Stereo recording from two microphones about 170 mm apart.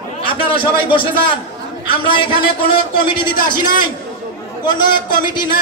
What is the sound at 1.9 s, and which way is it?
A man's voice, 30° left (ahead or behind).